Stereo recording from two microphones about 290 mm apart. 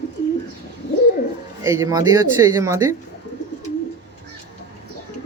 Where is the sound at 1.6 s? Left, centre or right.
Centre.